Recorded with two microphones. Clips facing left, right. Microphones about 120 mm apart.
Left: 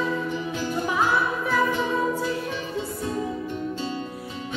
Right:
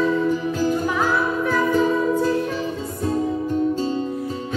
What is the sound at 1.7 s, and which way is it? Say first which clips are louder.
Music: right 6 dB; 40° right (ahead or behind).